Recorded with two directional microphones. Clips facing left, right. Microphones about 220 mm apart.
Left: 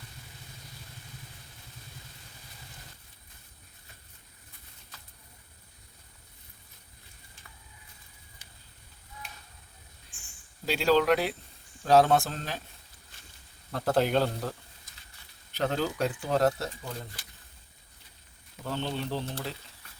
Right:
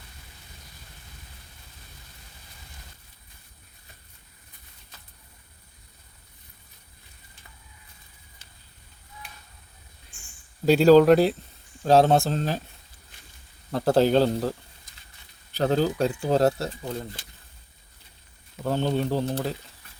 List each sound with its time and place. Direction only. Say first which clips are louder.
10.7 s speech: right 9 dB; 40° right (ahead or behind)
13.7 s speech: right 6 dB; 30° right (ahead or behind)
15.5 s speech: right 6 dB; 35° right (ahead or behind)
18.6 s speech: right 8 dB; 45° right (ahead or behind)